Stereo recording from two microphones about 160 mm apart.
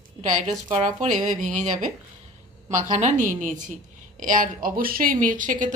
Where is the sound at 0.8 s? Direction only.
50° right (ahead or behind).